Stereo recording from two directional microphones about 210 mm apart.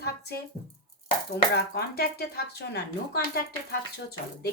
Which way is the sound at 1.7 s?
50° left (ahead or behind).